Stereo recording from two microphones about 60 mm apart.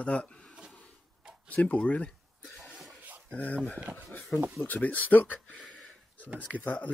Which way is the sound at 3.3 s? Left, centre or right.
Left.